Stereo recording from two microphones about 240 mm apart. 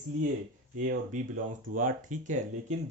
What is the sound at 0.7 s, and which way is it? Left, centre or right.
Speech, right.